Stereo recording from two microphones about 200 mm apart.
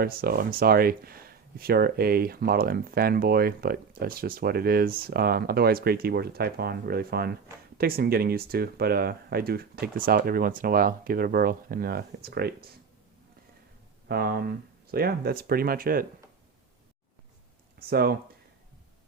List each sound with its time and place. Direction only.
0.0 s speech: 50° right (ahead or behind)
14.1 s speech: 50° right (ahead or behind)
17.7 s speech: 50° right (ahead or behind)